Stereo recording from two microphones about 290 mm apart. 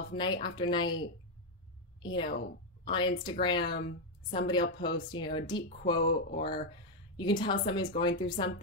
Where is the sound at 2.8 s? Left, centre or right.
Centre.